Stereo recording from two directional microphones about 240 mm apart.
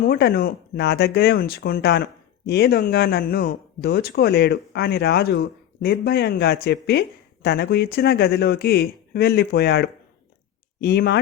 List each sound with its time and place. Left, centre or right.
0.0 s speech: left